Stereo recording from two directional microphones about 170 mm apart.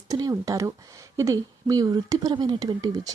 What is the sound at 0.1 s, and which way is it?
A woman's voice, 20° right (ahead or behind).